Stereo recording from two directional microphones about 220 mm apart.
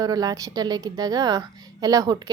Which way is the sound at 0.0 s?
15° right (ahead or behind).